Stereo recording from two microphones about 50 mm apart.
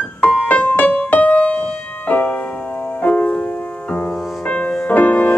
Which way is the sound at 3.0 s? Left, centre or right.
Left.